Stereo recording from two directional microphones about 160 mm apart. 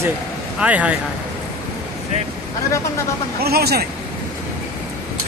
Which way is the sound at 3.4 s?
80° right.